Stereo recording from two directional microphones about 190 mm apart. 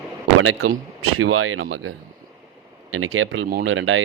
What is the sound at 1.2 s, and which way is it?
Speech, 90° right.